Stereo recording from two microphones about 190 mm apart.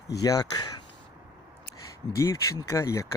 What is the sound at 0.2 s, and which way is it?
Speech, 20° left (ahead or behind).